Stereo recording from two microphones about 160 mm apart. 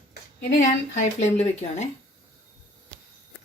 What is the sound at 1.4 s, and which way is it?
Speech, 45° left (ahead or behind).